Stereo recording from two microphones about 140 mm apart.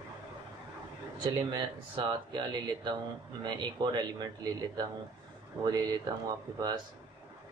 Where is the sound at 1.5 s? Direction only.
35° right (ahead or behind).